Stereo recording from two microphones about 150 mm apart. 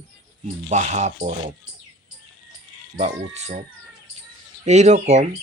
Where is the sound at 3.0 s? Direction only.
50° right (ahead or behind).